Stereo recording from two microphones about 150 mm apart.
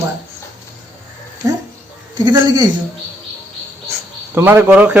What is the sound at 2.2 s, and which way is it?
Speech, 30° right (ahead or behind).